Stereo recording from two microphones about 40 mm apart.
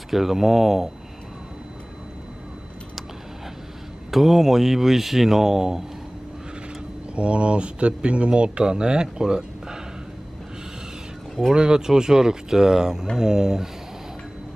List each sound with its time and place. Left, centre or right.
0.1 s speech: centre
4.1 s speech: centre
7.2 s speech: right
11.5 s speech: right